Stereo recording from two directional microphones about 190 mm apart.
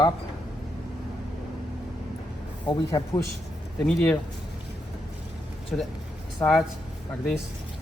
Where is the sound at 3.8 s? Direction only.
5° left (ahead or behind).